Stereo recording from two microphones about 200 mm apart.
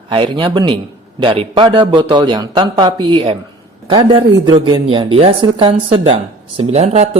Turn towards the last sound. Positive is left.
turn(degrees=-35)  # may be behind; listen again after turning